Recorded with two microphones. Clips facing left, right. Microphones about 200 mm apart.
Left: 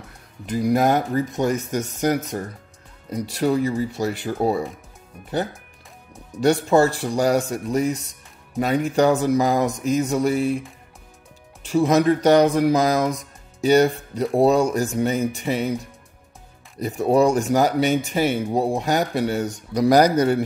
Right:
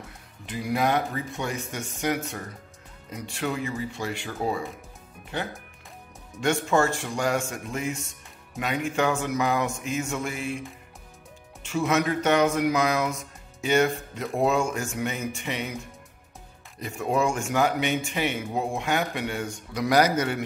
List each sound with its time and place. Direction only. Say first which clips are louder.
0.5 s speech: left 7 dB; 40° left (ahead or behind)
6.4 s speech: left 6 dB; 35° left (ahead or behind)
11.6 s speech: left 7 dB; 35° left (ahead or behind)